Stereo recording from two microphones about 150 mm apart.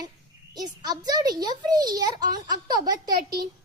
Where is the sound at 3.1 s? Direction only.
90° right.